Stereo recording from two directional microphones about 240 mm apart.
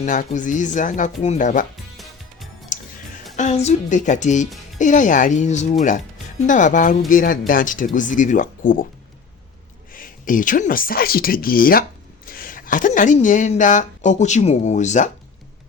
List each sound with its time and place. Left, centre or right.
0.0 s speech: left
2.7 s music: left
3.3 s speech: left
9.9 s speech: left